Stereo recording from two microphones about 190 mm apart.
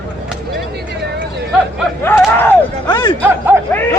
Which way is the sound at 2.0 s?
10° left (ahead or behind).